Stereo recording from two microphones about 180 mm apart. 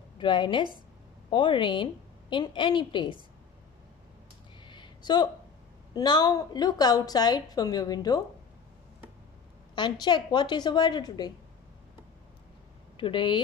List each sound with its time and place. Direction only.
0.2 s a woman's voice: 25° left (ahead or behind)
4.6 s a sound: 25° left (ahead or behind)
5.9 s a woman's voice: 25° left (ahead or behind)
9.8 s a woman's voice: 25° left (ahead or behind)
12.9 s speech: 30° left (ahead or behind)